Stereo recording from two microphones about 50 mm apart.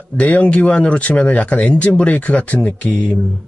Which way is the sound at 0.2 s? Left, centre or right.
Left.